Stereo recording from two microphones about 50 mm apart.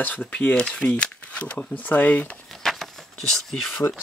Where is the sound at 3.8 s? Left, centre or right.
Left.